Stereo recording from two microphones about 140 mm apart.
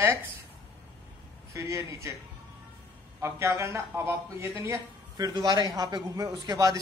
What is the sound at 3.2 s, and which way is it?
A man's voice, 20° right (ahead or behind).